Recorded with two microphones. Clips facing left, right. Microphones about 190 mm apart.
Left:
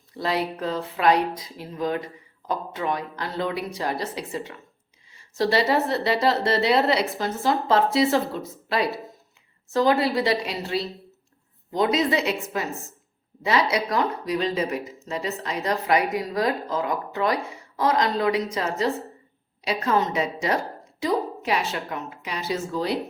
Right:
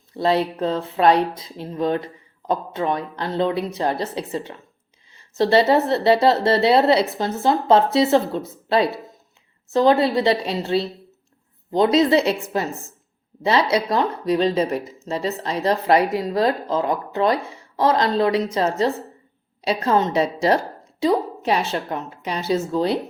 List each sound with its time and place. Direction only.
0.2 s a woman's voice: 25° right (ahead or behind)